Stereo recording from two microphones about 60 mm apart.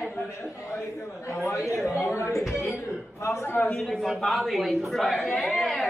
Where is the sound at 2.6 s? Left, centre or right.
Left.